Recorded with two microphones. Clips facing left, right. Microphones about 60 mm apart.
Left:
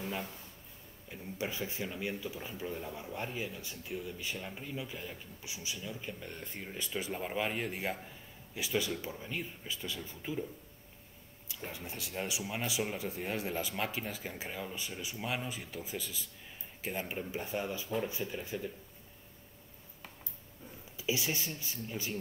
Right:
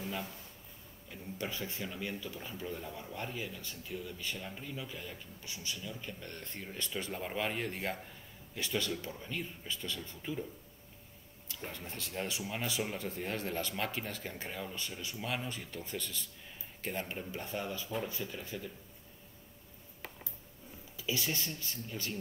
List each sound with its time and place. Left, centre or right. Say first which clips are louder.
1.1 s speech: left 2 dB; centre
11.4 s speech: left 1 dB; centre
20.9 s speech: left 2 dB; centre